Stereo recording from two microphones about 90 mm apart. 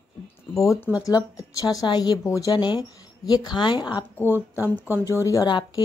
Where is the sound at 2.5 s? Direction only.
55° left (ahead or behind).